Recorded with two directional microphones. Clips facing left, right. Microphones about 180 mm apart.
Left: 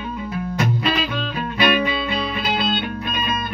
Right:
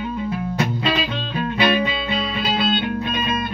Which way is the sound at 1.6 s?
25° right (ahead or behind).